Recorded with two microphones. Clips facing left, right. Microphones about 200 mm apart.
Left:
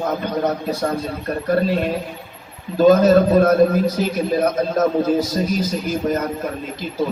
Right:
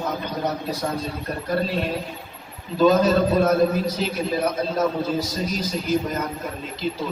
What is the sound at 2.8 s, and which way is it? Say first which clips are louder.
A man's voice: left 5 dB; 50° left (ahead or behind).